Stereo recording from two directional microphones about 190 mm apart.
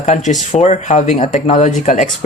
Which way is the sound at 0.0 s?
40° left (ahead or behind).